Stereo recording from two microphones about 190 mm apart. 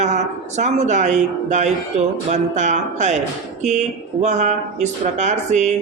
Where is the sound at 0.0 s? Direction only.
40° right (ahead or behind).